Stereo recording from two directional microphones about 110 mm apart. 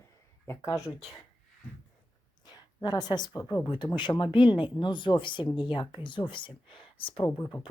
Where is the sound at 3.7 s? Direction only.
45° left (ahead or behind).